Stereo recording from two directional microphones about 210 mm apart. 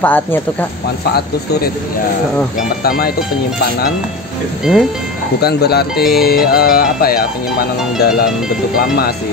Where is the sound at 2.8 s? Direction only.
45° left (ahead or behind).